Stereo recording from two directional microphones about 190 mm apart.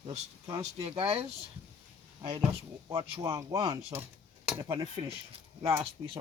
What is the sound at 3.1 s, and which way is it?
Speech, 20° right (ahead or behind).